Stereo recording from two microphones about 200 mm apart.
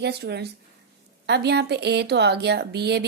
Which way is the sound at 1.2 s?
55° right (ahead or behind).